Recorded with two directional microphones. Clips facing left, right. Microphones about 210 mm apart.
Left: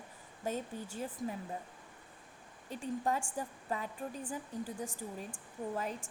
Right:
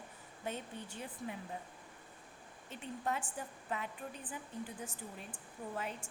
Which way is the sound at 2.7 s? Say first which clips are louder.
Left 5 dB; 40° left (ahead or behind).